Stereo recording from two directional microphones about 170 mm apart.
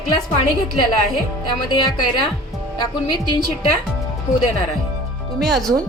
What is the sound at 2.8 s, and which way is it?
Speech, 25° left (ahead or behind).